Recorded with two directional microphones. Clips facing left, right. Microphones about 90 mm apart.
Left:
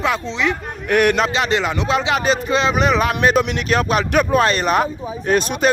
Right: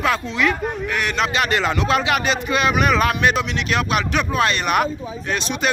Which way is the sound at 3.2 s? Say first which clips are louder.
Left 3 dB; 40° left (ahead or behind).